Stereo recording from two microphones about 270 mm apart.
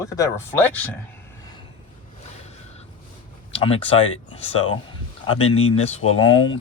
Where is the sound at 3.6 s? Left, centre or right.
Left.